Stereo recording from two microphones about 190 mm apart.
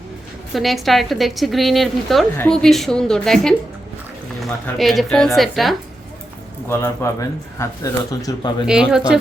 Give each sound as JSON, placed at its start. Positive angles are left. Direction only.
{"t": 0.5, "sound": "a woman's voice", "side_deg": 0}
{"t": 4.6, "sound": "a woman's voice", "side_deg": 0}
{"t": 6.7, "sound": "speech", "side_deg": 15}
{"t": 8.6, "sound": "a woman's voice", "side_deg": -5}